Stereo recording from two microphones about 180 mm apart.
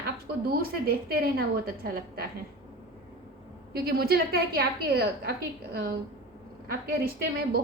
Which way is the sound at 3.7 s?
60° right (ahead or behind).